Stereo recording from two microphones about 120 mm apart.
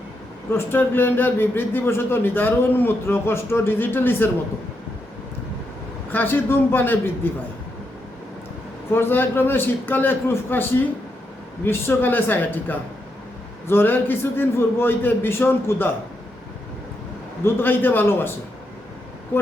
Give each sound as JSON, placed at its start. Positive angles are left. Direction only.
{"t": 0.5, "sound": "a man's voice", "side_deg": 20}
{"t": 6.1, "sound": "a man's voice", "side_deg": 15}
{"t": 8.9, "sound": "a man's voice", "side_deg": 20}
{"t": 17.4, "sound": "a man's voice", "side_deg": 15}